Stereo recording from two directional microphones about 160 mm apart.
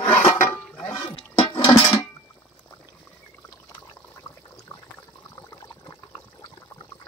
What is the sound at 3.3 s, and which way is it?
Water, 15° left (ahead or behind).